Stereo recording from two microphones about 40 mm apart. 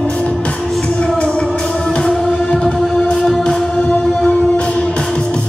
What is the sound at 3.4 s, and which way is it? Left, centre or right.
Music, left.